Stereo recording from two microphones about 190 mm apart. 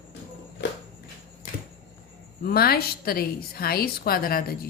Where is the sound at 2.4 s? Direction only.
55° left (ahead or behind).